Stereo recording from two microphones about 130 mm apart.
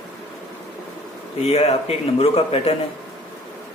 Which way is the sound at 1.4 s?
55° left (ahead or behind).